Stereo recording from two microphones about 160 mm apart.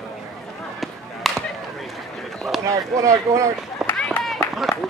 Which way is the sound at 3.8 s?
10° left (ahead or behind).